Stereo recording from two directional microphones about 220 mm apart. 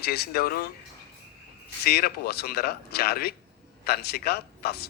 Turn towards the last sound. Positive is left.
turn(degrees=45)  # may be behind; listen again after turning